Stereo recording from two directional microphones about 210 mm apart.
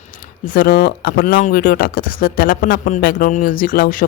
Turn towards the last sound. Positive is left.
turn(degrees=40)  # may be behind; listen again after turning